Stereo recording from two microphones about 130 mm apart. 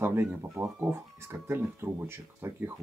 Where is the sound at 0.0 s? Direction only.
15° right (ahead or behind).